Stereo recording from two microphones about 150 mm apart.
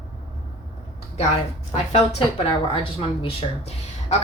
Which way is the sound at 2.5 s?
40° left (ahead or behind).